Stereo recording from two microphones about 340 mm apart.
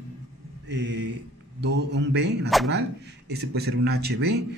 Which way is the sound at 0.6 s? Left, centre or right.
Right.